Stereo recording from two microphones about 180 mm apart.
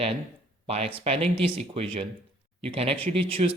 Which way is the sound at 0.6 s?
35° right (ahead or behind).